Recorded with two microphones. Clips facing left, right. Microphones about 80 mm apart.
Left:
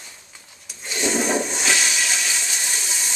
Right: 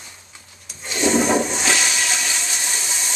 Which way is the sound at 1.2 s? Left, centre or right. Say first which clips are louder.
Right 4 dB; centre.